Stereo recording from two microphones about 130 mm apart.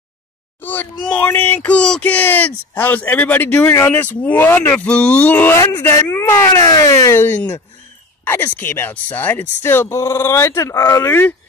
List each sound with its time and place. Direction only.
0.6 s speech: 15° left (ahead or behind)